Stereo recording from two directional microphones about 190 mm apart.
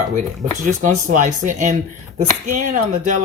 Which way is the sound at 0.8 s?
40° right (ahead or behind).